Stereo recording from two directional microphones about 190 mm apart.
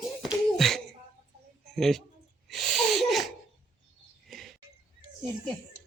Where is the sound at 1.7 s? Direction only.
Centre (ahead or behind).